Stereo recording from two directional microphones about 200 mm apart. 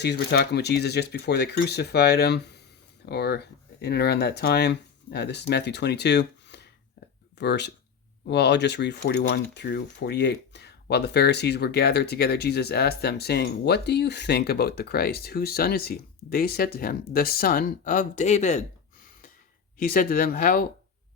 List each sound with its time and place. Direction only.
0.0 s speech: 55° left (ahead or behind); by 18.6 s 35° left (ahead or behind)
19.8 s speech: 45° left (ahead or behind)